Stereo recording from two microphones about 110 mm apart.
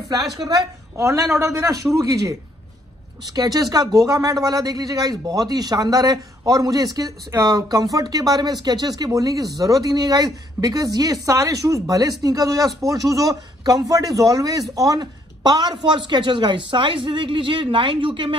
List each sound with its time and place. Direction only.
0.5 s speech: 30° right (ahead or behind); by 18.3 s 50° right (ahead or behind)